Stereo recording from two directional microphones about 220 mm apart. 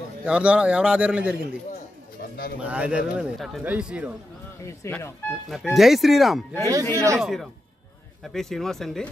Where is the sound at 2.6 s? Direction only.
5° right (ahead or behind).